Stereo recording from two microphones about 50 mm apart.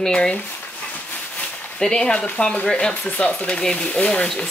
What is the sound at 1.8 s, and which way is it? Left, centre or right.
Speech, centre.